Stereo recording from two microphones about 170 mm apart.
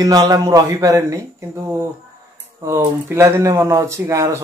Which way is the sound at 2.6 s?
15° right (ahead or behind).